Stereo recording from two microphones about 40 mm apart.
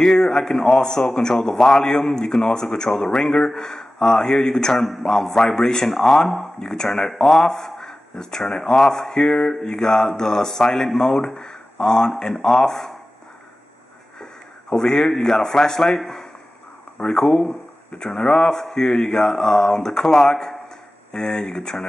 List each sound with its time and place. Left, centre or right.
0.0 s mantra: centre
2.0 s speech: centre
2.4 s mantra: centre
6.6 s speech: centre
8.5 s mantra: centre
14.8 s mantra: centre
18.8 s speech: left
19.0 s mantra: centre
21.1 s speech: centre